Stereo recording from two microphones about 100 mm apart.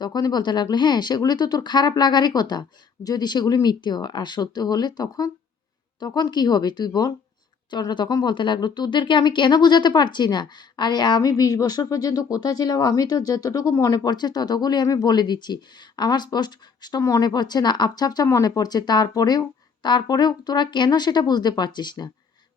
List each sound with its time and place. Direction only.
0.0 s speech: 40° left (ahead or behind)